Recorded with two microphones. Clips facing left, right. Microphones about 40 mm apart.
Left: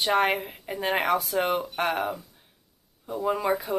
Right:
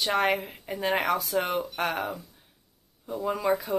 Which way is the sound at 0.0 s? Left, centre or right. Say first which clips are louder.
Left 2 dB; centre.